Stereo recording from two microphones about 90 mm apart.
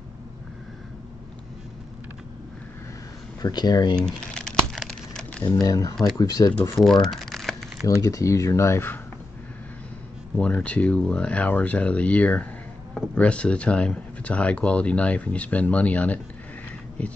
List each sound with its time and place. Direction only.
3.4 s speech: 50° left (ahead or behind)
4.0 s crumpling: 5° left (ahead or behind)
5.4 s speech: 40° left (ahead or behind)
6.7 s speech: 5° left (ahead or behind)
7.8 s speech: 40° left (ahead or behind)
10.3 s speech: 15° left (ahead or behind)
17.0 s a sound: 15° left (ahead or behind)